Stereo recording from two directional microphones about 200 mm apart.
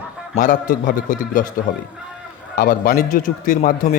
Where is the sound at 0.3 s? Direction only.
40° left (ahead or behind).